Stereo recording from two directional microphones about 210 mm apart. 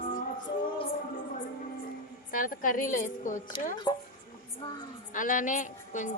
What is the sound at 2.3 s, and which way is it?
A woman's voice, 40° left (ahead or behind).